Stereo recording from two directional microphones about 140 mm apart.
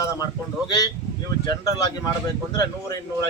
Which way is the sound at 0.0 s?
20° left (ahead or behind).